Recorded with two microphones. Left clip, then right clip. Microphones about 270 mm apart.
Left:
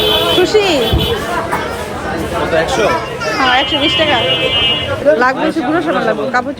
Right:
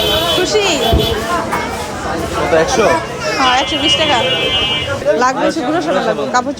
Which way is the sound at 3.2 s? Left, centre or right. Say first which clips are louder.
Left 3 dB; centre.